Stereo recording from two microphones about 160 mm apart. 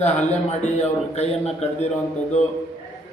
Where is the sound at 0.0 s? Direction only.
45° left (ahead or behind).